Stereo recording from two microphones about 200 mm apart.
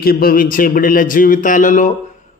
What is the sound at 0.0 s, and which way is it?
A man's voice, 50° left (ahead or behind).